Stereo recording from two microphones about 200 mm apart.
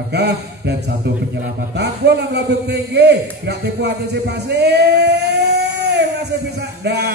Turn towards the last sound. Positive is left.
turn(degrees=-55)  # may be behind; listen again after turning